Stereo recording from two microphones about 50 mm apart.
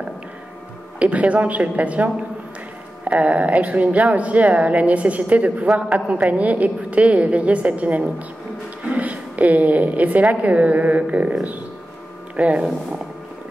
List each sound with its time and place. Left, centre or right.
0.9 s a woman's voice: right
3.2 s a woman's voice: right
12.4 s a woman's voice: right